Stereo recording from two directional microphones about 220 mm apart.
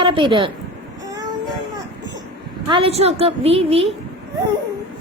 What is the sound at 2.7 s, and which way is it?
A woman's voice, 25° right (ahead or behind).